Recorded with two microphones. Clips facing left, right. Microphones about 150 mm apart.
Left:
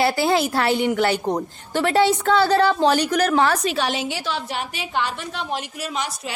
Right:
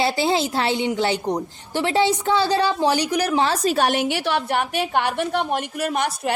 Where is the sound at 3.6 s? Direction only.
45° right (ahead or behind).